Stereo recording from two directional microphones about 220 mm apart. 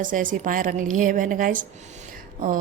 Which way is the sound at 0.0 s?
35° right (ahead or behind).